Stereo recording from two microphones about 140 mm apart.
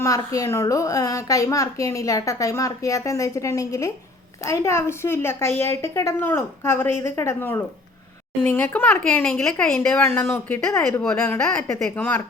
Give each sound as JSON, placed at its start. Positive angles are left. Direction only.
{"t": 0.0, "sound": "a woman's voice", "side_deg": 25}